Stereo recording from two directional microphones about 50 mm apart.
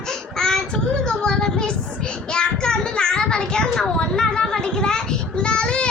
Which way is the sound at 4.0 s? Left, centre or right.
Centre.